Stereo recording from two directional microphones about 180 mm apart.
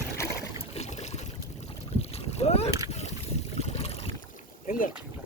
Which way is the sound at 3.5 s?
35° left (ahead or behind).